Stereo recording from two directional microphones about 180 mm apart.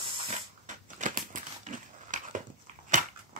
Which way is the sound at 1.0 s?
45° right (ahead or behind).